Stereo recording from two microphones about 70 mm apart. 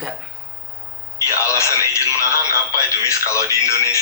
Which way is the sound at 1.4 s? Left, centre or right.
Left.